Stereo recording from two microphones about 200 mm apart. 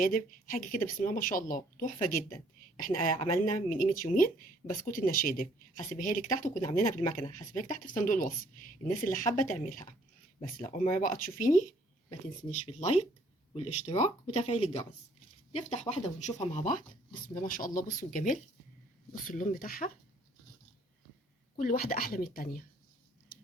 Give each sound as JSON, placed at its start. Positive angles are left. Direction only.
{"t": 0.0, "sound": "speech", "side_deg": 40}
{"t": 7.0, "sound": "speech", "side_deg": 25}
{"t": 7.3, "sound": "speech", "side_deg": 40}
{"t": 21.6, "sound": "speech", "side_deg": 45}